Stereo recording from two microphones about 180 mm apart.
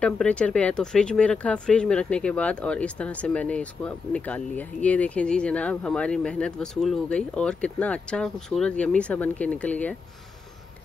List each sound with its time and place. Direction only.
0.0 s speech: 5° left (ahead or behind)